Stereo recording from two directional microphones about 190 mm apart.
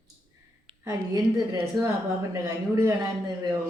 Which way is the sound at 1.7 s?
20° right (ahead or behind).